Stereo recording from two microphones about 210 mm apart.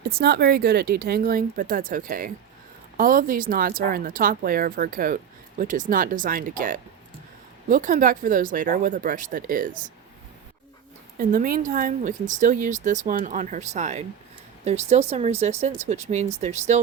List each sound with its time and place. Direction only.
0.1 s speech: 50° right (ahead or behind)
11.2 s speech: 40° right (ahead or behind)